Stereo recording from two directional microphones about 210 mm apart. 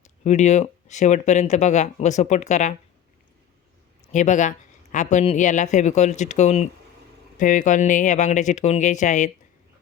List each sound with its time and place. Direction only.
0.0 s speech: 35° left (ahead or behind)
4.1 s speech: 35° left (ahead or behind)